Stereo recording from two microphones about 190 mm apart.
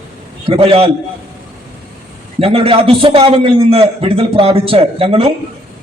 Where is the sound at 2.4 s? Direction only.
30° right (ahead or behind).